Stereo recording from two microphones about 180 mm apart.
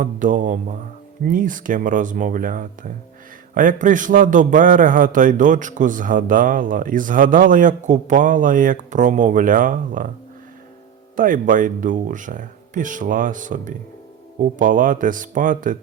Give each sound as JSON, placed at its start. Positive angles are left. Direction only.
{"t": 0.0, "sound": "a man's voice", "side_deg": -45}
{"t": 11.2, "sound": "a man's voice", "side_deg": -50}